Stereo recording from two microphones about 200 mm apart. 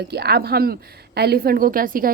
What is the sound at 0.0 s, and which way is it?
A woman's voice, 55° right (ahead or behind).